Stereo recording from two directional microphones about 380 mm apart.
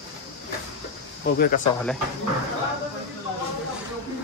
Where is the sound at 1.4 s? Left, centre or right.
Left.